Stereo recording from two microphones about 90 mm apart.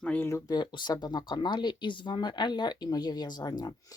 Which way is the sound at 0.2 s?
30° left (ahead or behind).